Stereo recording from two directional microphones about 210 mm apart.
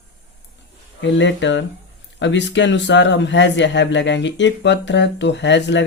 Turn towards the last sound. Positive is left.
turn(degrees=55)  # may be behind; listen again after turning